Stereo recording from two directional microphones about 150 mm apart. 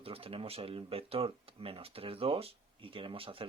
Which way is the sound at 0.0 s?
40° right (ahead or behind).